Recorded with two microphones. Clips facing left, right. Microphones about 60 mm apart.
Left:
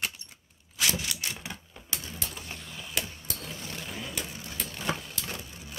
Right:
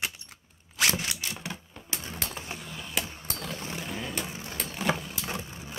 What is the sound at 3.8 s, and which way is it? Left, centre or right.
Vehicle, centre.